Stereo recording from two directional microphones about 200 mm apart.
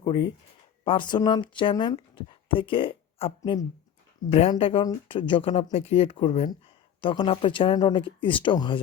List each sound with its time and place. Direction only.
0.0 s speech: 25° left (ahead or behind)